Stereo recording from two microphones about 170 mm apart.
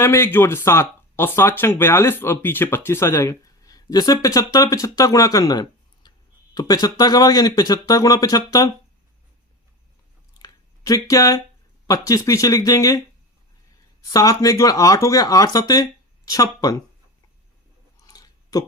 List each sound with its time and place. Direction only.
0.0 s speech: 15° left (ahead or behind)
10.3 s a sound: 20° left (ahead or behind)
11.9 s speech: 20° left (ahead or behind)
14.1 s speech: 20° left (ahead or behind)
18.0 s chewing: 20° left (ahead or behind)